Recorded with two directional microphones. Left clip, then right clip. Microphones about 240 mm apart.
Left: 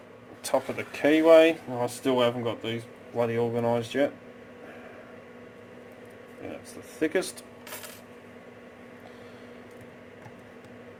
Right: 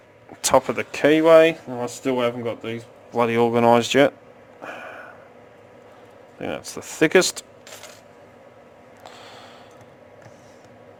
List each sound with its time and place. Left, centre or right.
0.4 s speech: right
3.2 s speech: right
6.4 s speech: right